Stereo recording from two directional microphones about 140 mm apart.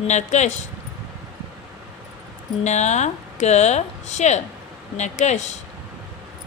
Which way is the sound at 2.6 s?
55° left (ahead or behind).